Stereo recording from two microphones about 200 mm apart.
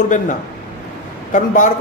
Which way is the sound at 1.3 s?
40° left (ahead or behind).